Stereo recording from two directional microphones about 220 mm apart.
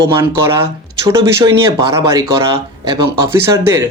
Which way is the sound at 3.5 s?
10° right (ahead or behind).